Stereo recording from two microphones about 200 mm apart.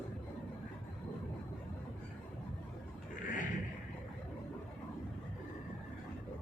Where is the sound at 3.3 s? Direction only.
40° left (ahead or behind).